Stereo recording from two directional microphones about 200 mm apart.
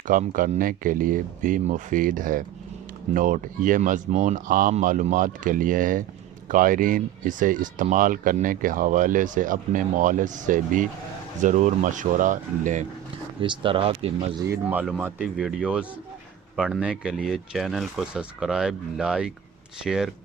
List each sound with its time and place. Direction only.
0.1 s speech: 40° right (ahead or behind)
13.4 s speech: 25° right (ahead or behind)
14.5 s speech: 10° right (ahead or behind)